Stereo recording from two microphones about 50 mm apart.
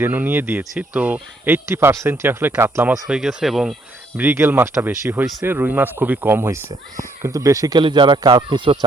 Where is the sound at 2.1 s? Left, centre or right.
Right.